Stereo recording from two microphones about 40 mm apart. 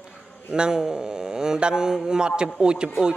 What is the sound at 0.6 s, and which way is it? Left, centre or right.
A man's voice, centre.